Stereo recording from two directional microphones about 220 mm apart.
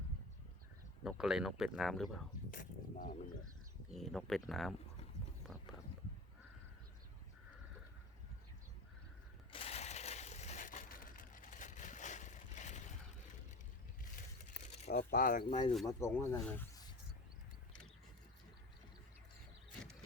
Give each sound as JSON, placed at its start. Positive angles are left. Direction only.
{"t": 1.0, "sound": "speech", "side_deg": 0}
{"t": 2.5, "sound": "a sound", "side_deg": 40}
{"t": 3.9, "sound": "speech", "side_deg": 0}
{"t": 9.5, "sound": "crushing", "side_deg": 25}
{"t": 14.6, "sound": "coin", "side_deg": 30}
{"t": 14.9, "sound": "speech", "side_deg": 40}
{"t": 15.4, "sound": "speech", "side_deg": 25}
{"t": 15.9, "sound": "speech", "side_deg": 10}